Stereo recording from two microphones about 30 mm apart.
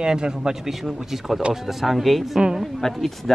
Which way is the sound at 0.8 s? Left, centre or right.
Centre.